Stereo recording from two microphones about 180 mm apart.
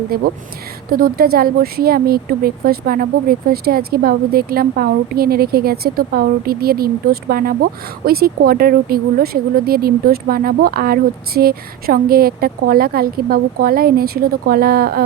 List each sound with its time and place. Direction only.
0.1 s a woman's voice: 55° right (ahead or behind)